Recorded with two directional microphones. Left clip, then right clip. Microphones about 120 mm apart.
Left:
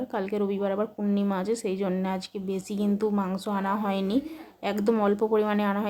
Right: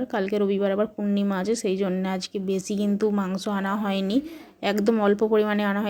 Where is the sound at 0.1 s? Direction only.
30° right (ahead or behind).